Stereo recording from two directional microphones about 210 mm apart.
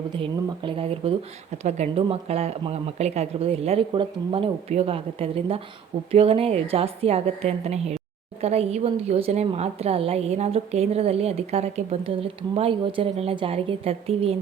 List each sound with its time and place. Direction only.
0.1 s a woman's voice: 25° right (ahead or behind)